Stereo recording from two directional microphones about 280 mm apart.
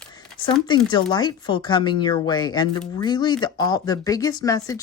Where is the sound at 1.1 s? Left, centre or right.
Centre.